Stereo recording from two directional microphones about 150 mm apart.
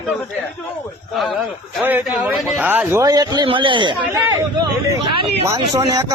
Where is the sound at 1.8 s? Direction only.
10° right (ahead or behind).